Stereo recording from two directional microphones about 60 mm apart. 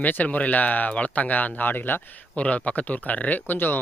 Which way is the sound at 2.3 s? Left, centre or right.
Left.